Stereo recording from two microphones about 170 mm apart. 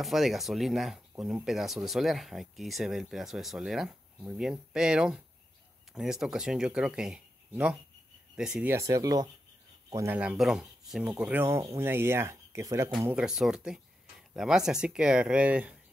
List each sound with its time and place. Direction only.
0.0 s speech: centre (ahead or behind)
8.7 s speech: 20° right (ahead or behind)
10.1 s speech: 5° right (ahead or behind)
13.1 s speech: 5° right (ahead or behind)